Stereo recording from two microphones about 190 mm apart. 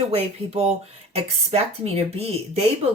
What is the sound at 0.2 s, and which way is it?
Speech, 35° right (ahead or behind).